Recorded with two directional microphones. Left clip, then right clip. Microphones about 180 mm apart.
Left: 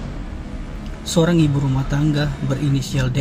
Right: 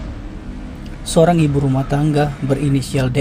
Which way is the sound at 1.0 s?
25° right (ahead or behind).